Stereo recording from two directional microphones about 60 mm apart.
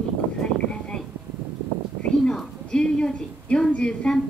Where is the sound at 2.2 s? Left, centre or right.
Centre.